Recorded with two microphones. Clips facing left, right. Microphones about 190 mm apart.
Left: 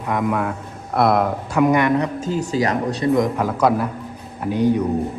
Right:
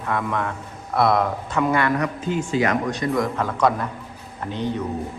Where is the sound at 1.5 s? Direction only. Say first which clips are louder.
Left 5 dB; 15° left (ahead or behind).